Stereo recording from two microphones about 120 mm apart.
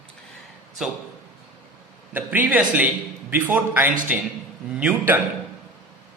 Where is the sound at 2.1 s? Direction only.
15° right (ahead or behind).